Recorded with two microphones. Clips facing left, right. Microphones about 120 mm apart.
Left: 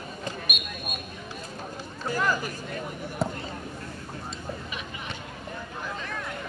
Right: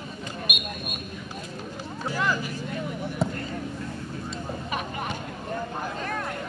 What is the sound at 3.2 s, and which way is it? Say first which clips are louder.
Basketball bounce: right 1 dB; centre (ahead or behind).